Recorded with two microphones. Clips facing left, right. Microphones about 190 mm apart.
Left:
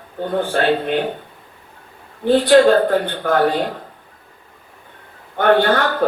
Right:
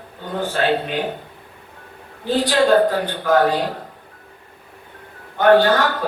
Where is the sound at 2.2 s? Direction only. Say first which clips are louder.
Left 6 dB; 60° left (ahead or behind).